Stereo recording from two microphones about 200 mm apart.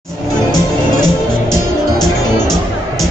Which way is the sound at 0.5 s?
20° left (ahead or behind).